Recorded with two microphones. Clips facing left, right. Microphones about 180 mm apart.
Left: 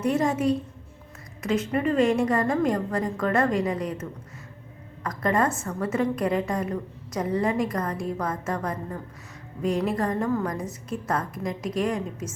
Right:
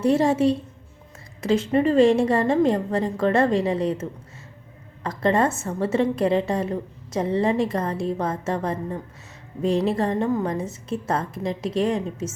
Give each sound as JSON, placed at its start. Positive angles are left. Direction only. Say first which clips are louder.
{"t": 0.0, "sound": "a woman's voice", "louder": "right 5 dB", "side_deg": -30}
{"t": 5.0, "sound": "a woman's voice", "louder": "right 3 dB", "side_deg": -25}